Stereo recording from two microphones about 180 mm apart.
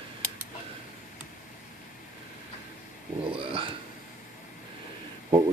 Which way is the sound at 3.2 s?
30° right (ahead or behind).